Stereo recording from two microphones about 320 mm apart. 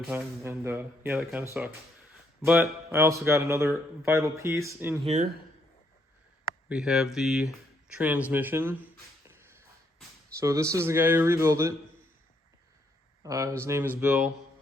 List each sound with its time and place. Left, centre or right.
0.0 s speech: centre
5.0 s speech: right
6.7 s speech: centre
8.3 s a sound: centre
10.4 s speech: centre
13.2 s speech: centre